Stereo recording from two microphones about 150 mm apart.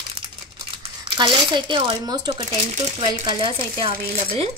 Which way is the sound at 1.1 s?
30° right (ahead or behind).